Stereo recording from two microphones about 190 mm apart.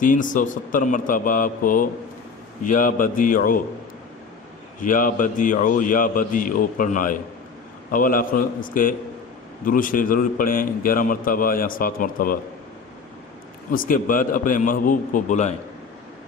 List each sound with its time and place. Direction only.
0.0 s a man's voice: 45° left (ahead or behind)
4.8 s a man's voice: 45° left (ahead or behind)
13.7 s a man's voice: 45° left (ahead or behind)